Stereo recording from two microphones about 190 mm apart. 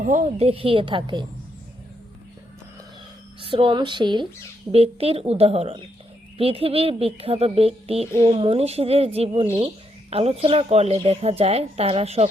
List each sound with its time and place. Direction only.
0.0 s a woman's voice: 35° right (ahead or behind)
3.4 s a woman's voice: 25° right (ahead or behind)